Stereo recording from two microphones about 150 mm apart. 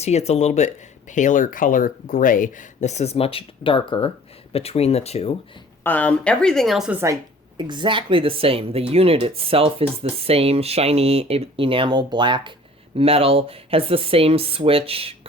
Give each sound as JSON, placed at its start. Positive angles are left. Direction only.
{"t": 0.0, "sound": "speech", "side_deg": 45}
{"t": 5.8, "sound": "a woman's voice", "side_deg": 10}
{"t": 6.9, "sound": "a woman's voice", "side_deg": -20}
{"t": 7.5, "sound": "speech", "side_deg": -30}